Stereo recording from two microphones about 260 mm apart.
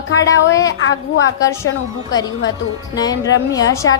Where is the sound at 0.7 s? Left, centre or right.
Left.